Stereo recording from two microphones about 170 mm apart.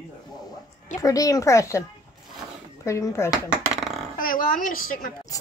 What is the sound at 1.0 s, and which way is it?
Speech, 20° left (ahead or behind).